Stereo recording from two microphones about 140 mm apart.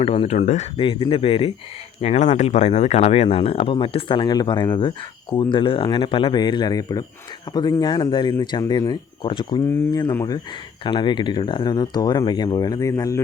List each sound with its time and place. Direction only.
0.0 s speech: 45° left (ahead or behind)
0.8 s speech: 35° left (ahead or behind)
2.0 s speech: 55° left (ahead or behind); by 9.6 s 35° left (ahead or behind)
9.9 s speech: 25° left (ahead or behind)
10.8 s speech: 35° left (ahead or behind)